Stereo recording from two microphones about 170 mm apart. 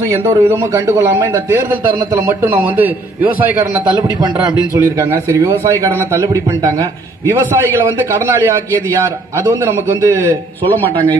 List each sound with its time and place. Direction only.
0.2 s a man's voice: 15° right (ahead or behind)
2.5 s a man's voice: 10° right (ahead or behind)
4.2 s a man's voice: 20° right (ahead or behind)
9.0 s a man's voice: 15° right (ahead or behind)